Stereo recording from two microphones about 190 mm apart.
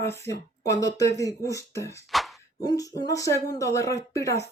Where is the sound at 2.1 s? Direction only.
Centre (ahead or behind).